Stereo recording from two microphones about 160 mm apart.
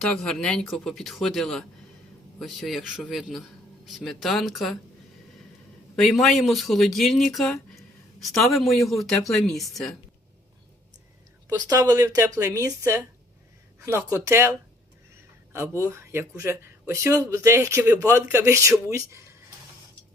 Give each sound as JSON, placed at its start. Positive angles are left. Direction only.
{"t": 0.0, "sound": "speech", "side_deg": 5}
{"t": 6.0, "sound": "speech", "side_deg": 0}
{"t": 11.4, "sound": "speech", "side_deg": -20}
{"t": 15.8, "sound": "speech", "side_deg": -15}